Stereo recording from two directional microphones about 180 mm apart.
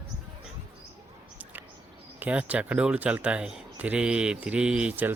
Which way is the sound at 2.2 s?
5° right (ahead or behind).